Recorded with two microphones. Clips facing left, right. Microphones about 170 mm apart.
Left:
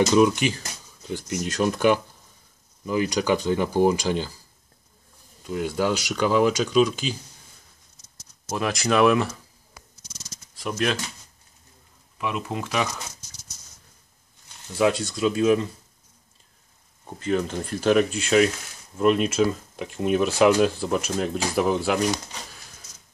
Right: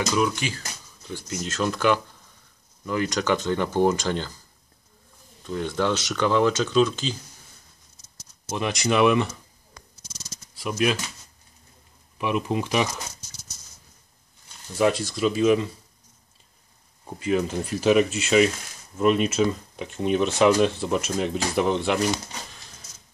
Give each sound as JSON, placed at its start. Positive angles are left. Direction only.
{"t": 0.1, "sound": "speech", "side_deg": 20}
{"t": 5.4, "sound": "speech", "side_deg": 10}
{"t": 8.5, "sound": "speech", "side_deg": 0}
{"t": 12.2, "sound": "speech", "side_deg": -20}
{"t": 14.8, "sound": "speech", "side_deg": 0}
{"t": 17.0, "sound": "speech", "side_deg": -5}